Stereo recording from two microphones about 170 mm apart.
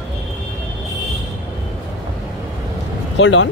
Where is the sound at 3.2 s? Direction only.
90° left.